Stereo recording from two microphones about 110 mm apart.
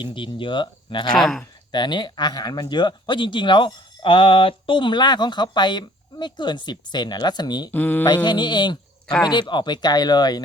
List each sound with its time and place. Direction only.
0.0 s speech: 50° left (ahead or behind)
1.2 s speech: 5° left (ahead or behind)
1.7 s speech: 40° left (ahead or behind)
7.7 s speech: 15° left (ahead or behind)
8.0 s speech: 45° left (ahead or behind)